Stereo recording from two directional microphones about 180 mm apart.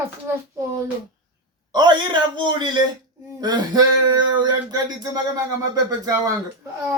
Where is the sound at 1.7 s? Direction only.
25° right (ahead or behind).